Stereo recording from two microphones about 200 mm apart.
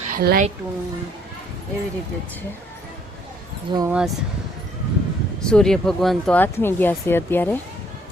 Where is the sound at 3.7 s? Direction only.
25° right (ahead or behind).